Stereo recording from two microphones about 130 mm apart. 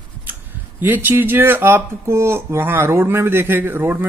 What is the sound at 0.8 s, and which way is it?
Speech, 15° right (ahead or behind).